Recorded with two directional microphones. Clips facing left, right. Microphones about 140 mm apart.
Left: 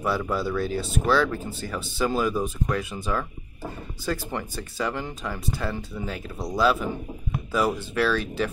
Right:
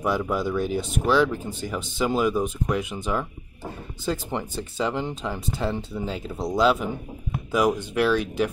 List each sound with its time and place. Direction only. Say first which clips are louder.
0.0 s speech: right 1 dB; 15° right (ahead or behind)